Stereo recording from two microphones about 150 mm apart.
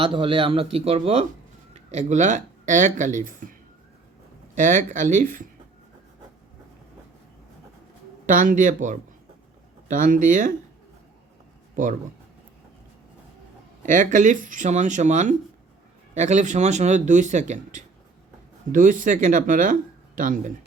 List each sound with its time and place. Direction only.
0.0 s speech: 35° right (ahead or behind); by 3.5 s 60° right (ahead or behind)
4.5 s speech: 60° right (ahead or behind)
8.3 s speech: 60° right (ahead or behind)
13.8 s speech: 60° right (ahead or behind)